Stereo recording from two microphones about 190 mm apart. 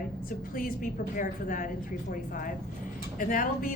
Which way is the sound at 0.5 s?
45° left (ahead or behind).